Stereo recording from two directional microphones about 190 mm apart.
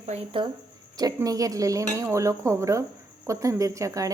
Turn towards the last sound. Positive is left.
turn(degrees=-15)  # may be behind; listen again after turning